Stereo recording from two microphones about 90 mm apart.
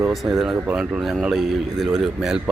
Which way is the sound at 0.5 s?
20° right (ahead or behind).